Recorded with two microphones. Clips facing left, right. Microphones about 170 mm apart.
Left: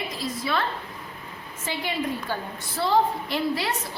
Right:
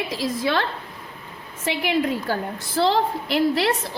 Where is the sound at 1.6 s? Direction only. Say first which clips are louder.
Right 6 dB; 80° right.